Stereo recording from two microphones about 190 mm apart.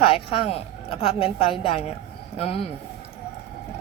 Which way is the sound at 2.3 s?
30° left (ahead or behind).